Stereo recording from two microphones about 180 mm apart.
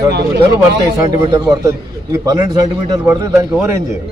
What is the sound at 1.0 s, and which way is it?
A man's voice, 20° right (ahead or behind).